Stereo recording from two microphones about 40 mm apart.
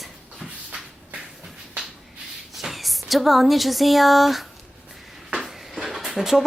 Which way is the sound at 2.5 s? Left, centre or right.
Centre.